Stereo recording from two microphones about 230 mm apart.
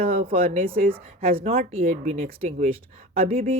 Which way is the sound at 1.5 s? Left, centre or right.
Right.